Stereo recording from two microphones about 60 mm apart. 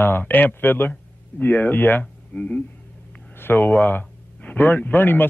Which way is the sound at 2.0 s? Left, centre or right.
Centre.